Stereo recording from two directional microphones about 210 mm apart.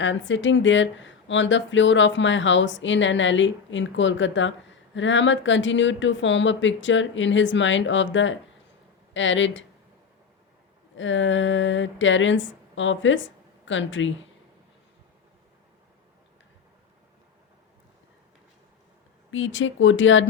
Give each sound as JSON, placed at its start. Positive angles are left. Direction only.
{"t": 0.0, "sound": "speech", "side_deg": 60}
{"t": 10.9, "sound": "speech", "side_deg": 65}
{"t": 19.3, "sound": "speech", "side_deg": 65}